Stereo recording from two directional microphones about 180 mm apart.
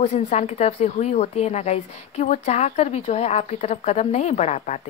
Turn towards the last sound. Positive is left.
turn(degrees=40)  # may be behind; listen again after turning